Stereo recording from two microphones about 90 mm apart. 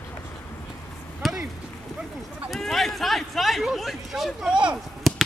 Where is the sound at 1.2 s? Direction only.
Centre (ahead or behind).